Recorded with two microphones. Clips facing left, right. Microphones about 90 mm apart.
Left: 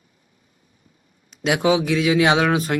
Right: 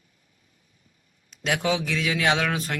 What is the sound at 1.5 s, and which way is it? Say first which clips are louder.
Speech: left 7 dB; 15° left (ahead or behind).